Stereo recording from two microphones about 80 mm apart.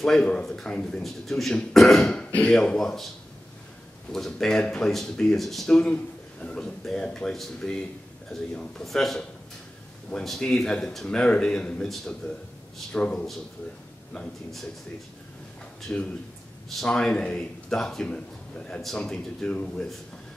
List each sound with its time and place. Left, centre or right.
0.0 s a man's voice: centre
4.1 s a man's voice: centre
10.2 s a man's voice: centre
15.9 s a man's voice: centre
16.6 s a man's voice: centre